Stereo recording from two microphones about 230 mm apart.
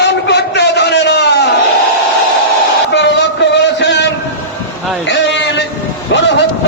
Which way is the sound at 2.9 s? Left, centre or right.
Left.